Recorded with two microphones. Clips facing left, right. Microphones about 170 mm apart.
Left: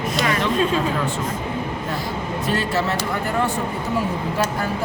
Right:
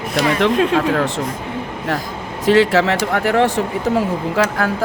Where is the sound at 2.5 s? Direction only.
90° right.